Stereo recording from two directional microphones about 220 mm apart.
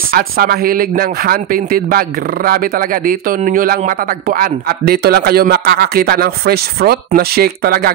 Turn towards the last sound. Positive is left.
turn(degrees=-45)  # may be behind; listen again after turning